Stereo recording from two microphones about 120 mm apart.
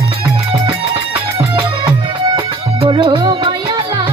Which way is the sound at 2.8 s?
45° right (ahead or behind).